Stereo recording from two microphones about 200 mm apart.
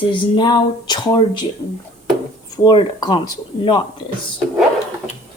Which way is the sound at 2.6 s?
20° left (ahead or behind).